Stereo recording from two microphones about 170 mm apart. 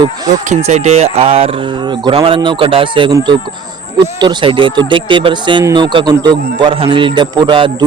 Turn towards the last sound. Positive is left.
turn(degrees=-30)  # may be behind; listen again after turning